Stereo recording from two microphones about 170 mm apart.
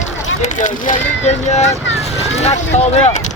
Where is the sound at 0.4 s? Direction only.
45° left (ahead or behind).